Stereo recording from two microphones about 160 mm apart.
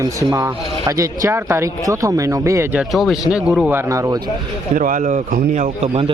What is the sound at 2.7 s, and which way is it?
Speech, centre (ahead or behind).